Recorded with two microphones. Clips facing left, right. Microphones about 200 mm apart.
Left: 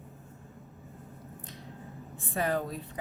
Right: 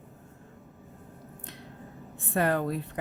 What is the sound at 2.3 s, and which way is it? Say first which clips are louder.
Speech: right 4 dB; 60° right (ahead or behind).